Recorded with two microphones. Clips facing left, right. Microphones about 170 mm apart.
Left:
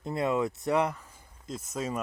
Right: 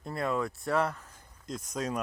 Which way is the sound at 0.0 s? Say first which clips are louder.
Left 3 dB; 20° left (ahead or behind).